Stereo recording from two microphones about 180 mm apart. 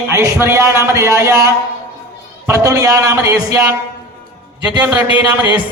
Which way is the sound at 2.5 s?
15° right (ahead or behind).